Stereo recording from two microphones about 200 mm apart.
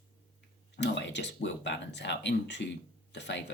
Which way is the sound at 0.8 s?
60° left (ahead or behind).